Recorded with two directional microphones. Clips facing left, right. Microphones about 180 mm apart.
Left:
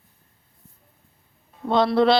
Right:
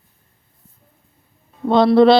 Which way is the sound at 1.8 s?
30° right (ahead or behind).